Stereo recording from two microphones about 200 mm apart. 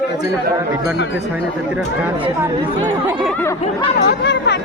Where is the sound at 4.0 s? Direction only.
55° left (ahead or behind).